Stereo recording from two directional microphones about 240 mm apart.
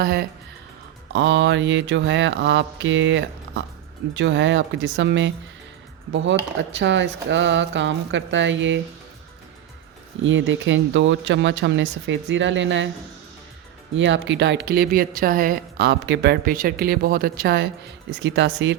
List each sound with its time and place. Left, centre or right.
0.0 s a woman's voice: right
10.2 s speech: right
13.9 s a woman's voice: right